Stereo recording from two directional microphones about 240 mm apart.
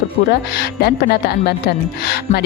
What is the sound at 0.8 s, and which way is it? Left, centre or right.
Speech, left.